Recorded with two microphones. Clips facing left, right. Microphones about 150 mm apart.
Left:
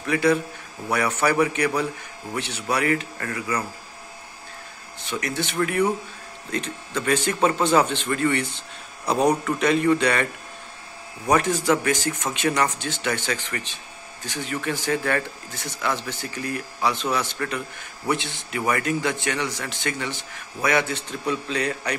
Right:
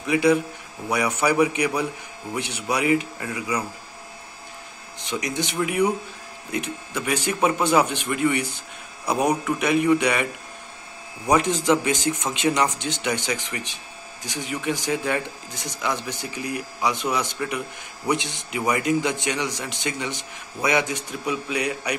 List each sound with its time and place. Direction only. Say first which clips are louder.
0.0 s speech: right 2 dB; 15° right (ahead or behind)
5.0 s speech: right 1 dB; 15° right (ahead or behind)
11.2 s speech: right 1 dB; 15° right (ahead or behind)